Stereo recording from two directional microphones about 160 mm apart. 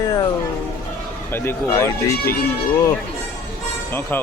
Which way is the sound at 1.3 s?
15° left (ahead or behind).